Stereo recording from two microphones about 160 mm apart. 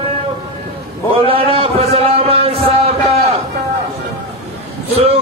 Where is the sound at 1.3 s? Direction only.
35° right (ahead or behind).